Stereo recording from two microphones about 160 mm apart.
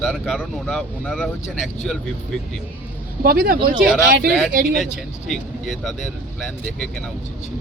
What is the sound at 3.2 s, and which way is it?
Speech, 65° right (ahead or behind).